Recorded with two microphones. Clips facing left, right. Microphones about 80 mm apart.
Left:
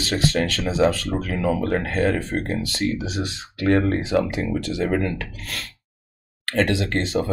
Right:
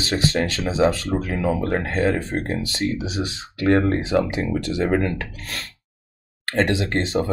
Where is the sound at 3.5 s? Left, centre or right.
Right.